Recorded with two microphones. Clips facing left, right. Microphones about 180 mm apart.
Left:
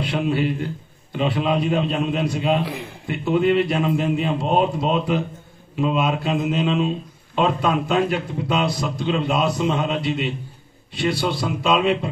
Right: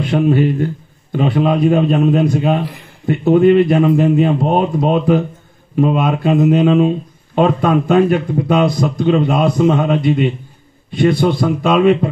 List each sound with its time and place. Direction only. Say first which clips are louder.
0.0 s speech: right 8 dB; 45° right (ahead or behind)